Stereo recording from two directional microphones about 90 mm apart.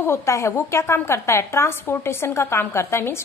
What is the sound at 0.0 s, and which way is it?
A woman's voice, 30° left (ahead or behind).